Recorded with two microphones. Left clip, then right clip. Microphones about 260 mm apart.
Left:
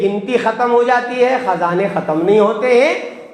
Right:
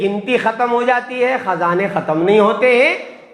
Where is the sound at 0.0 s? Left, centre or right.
Right.